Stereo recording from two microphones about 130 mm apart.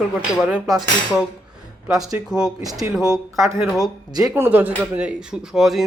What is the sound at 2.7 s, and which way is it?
Speech, 25° right (ahead or behind).